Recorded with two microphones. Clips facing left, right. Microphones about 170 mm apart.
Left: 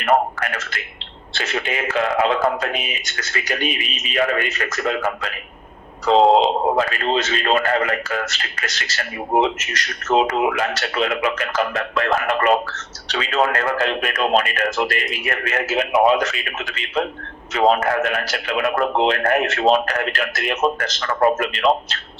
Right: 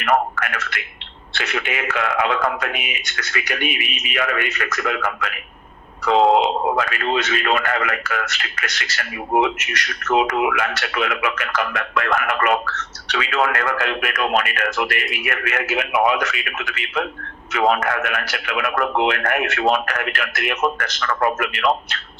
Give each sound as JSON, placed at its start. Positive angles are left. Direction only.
{"t": 0.0, "sound": "a man's voice", "side_deg": 30}